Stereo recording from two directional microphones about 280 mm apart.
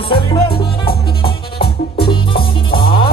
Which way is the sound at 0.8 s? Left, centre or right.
Left.